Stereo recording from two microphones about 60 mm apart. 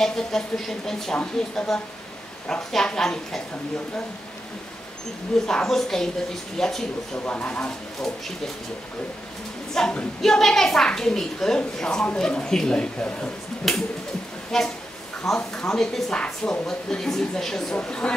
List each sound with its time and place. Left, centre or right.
0.0 s a woman's voice: centre
5.5 s a woman's voice: centre
7.2 s speech: left
9.8 s a woman's voice: centre
13.7 s finger snapping: centre
15.3 s a woman's voice: centre